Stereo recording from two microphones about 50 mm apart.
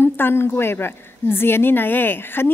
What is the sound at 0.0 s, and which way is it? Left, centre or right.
A woman's voice, left.